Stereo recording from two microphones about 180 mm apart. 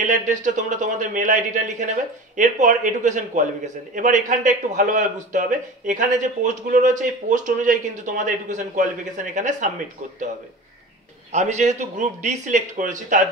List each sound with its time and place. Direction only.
0.0 s a man's voice: 45° right (ahead or behind)
11.3 s a man's voice: 40° right (ahead or behind)